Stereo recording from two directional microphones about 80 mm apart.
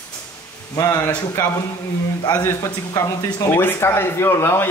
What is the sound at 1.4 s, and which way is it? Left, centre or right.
Speech, left.